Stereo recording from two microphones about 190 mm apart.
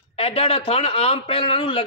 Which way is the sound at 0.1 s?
30° left (ahead or behind).